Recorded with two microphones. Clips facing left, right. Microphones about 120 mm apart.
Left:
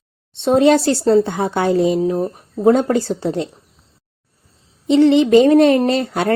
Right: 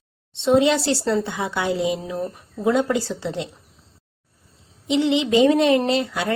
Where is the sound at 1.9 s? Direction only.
30° left (ahead or behind).